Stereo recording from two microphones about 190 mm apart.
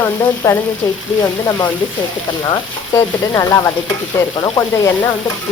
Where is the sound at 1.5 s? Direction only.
20° left (ahead or behind).